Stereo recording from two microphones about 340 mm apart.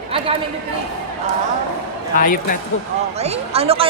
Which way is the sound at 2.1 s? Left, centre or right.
Left.